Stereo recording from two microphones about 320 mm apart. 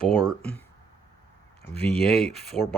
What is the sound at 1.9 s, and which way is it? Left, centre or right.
Speech, left.